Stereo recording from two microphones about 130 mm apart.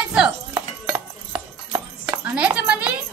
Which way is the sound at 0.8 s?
20° right (ahead or behind).